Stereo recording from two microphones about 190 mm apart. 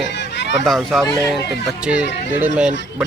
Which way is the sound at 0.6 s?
Centre (ahead or behind).